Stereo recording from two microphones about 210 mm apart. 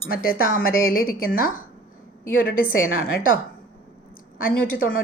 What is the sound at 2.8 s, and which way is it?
Speech, 75° left (ahead or behind).